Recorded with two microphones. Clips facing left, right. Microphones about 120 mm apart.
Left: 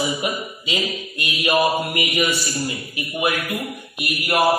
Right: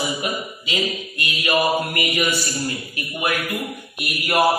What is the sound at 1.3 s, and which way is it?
Mantra, 25° left (ahead or behind).